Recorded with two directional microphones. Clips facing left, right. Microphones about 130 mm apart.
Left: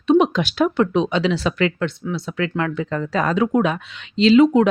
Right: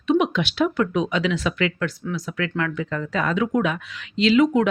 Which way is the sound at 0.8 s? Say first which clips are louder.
Left 4 dB; 30° left (ahead or behind).